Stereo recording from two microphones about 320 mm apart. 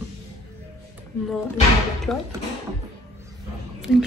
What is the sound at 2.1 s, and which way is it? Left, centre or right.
Speech, centre.